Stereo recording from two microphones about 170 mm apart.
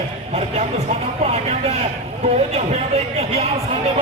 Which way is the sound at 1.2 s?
40° right (ahead or behind).